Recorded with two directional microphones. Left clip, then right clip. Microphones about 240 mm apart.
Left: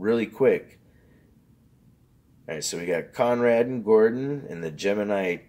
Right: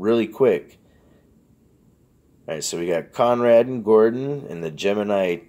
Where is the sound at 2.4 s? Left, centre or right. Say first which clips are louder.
Right 4 dB; right.